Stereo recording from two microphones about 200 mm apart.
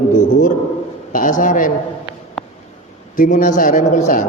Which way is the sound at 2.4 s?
Centre (ahead or behind).